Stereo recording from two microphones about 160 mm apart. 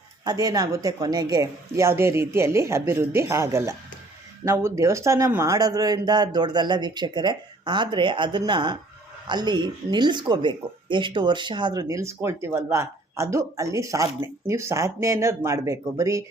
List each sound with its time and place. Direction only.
0.3 s speech: 25° right (ahead or behind)